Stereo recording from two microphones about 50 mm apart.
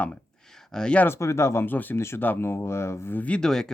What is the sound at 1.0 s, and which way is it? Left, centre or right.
Speech, left.